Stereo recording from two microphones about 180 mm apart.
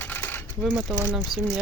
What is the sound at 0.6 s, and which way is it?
Speech, 5° right (ahead or behind).